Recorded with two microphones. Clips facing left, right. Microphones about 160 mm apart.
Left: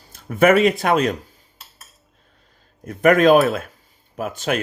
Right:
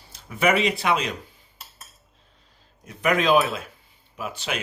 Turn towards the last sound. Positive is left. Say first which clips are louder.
# left 7 dB
turn(degrees=45)  # may be behind; listen again after turning